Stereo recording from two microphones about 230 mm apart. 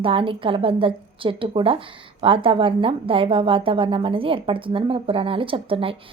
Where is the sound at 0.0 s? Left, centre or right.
Right.